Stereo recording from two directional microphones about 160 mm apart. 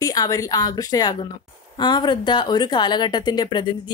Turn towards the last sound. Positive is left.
turn(degrees=30)  # may be behind; listen again after turning